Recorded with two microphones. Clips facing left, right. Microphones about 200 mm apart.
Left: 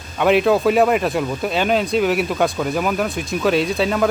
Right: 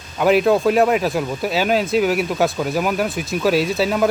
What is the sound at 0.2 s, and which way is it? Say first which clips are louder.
Speech: even; centre (ahead or behind).